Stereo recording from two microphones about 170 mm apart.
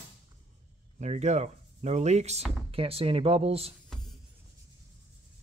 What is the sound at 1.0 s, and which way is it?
Speech, 40° right (ahead or behind).